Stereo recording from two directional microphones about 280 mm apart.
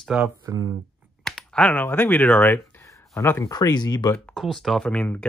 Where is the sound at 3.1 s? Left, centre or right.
Centre.